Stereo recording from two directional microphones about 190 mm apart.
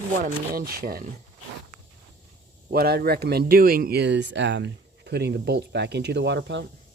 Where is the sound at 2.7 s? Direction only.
55° right (ahead or behind).